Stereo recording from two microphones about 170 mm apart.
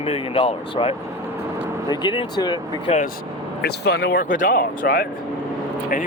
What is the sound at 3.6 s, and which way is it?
Speech, 75° left (ahead or behind).